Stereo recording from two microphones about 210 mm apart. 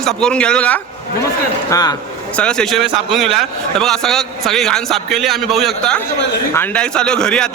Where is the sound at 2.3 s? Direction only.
5° left (ahead or behind).